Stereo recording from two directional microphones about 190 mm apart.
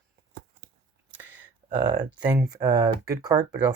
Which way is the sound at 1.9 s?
20° right (ahead or behind).